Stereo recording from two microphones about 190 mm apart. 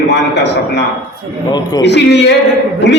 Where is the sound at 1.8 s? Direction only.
65° left (ahead or behind).